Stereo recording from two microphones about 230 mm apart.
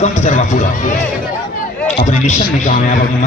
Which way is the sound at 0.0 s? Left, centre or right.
Left.